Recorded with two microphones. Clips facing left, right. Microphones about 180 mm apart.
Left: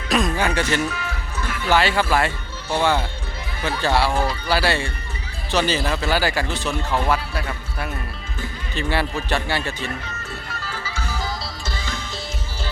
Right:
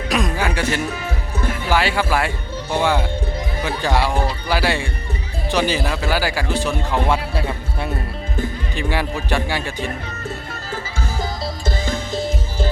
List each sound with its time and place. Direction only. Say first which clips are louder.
0.1 s music: left 1 dB; 10° right (ahead or behind)
0.9 s music: right 4 dB; 50° right (ahead or behind)
1.7 s speech: left 1 dB; 10° right (ahead or behind)
7.0 s a man's voice: right 2 dB; 25° right (ahead or behind)
8.7 s speech: left 1 dB; 15° right (ahead or behind)
10.7 s music: right 4 dB; 50° right (ahead or behind)